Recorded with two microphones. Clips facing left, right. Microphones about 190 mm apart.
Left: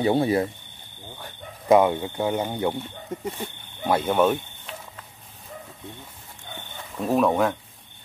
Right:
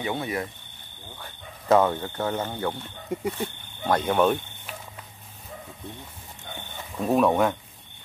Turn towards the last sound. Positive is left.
turn(degrees=0)  # may be behind; listen again after turning